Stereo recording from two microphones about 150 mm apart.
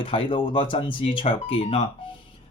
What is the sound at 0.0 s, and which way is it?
Speech, 35° left (ahead or behind).